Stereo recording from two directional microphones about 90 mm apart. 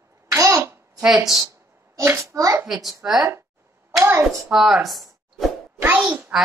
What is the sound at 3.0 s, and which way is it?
Speech, 20° right (ahead or behind).